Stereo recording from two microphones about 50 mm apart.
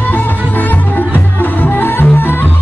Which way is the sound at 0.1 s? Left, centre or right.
Left.